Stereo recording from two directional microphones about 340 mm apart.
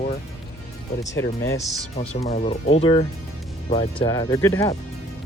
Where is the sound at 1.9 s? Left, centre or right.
Centre.